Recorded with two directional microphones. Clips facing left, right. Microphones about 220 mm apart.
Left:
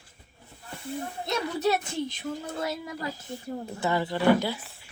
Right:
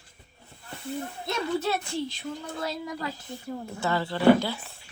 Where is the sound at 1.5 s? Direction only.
20° left (ahead or behind).